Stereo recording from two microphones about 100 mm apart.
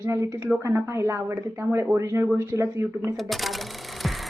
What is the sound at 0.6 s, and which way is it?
A woman's voice, 30° right (ahead or behind).